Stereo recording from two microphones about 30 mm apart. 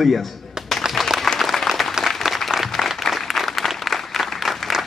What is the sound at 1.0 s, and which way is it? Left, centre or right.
Applause, centre.